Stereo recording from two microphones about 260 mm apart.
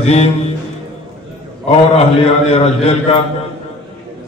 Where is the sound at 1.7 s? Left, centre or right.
Left.